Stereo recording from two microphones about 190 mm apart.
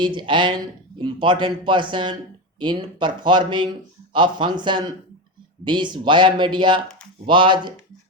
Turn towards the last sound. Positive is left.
turn(degrees=-25)  # may be behind; listen again after turning